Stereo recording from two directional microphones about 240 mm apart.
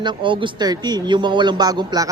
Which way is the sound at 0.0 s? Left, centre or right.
Centre.